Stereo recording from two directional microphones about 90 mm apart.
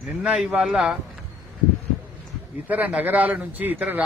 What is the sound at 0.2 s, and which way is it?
Speech, 10° right (ahead or behind).